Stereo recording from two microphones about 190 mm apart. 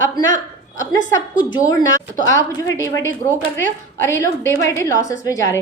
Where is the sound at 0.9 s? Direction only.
20° left (ahead or behind).